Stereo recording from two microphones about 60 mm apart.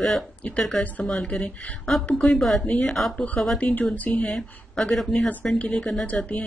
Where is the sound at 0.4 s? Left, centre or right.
Left.